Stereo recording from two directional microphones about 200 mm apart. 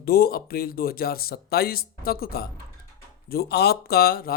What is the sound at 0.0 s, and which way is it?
Speech, 50° left (ahead or behind).